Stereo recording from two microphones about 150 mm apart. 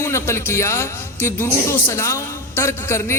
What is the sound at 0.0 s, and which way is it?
A man's voice, 20° left (ahead or behind).